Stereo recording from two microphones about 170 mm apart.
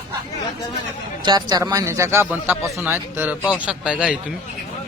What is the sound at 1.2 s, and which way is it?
A man's voice, 25° right (ahead or behind).